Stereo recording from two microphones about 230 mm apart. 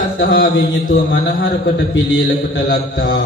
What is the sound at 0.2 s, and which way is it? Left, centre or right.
Mantra, left.